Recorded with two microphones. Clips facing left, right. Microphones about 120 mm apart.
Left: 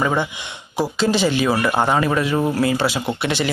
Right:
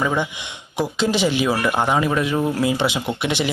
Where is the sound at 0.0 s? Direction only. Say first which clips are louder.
Left 1 dB; 10° left (ahead or behind).